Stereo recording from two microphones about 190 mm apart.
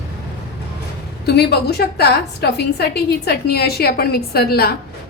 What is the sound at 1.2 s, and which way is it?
A woman's voice, 60° left (ahead or behind).